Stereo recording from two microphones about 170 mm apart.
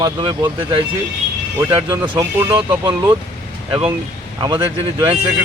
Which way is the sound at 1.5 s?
15° right (ahead or behind).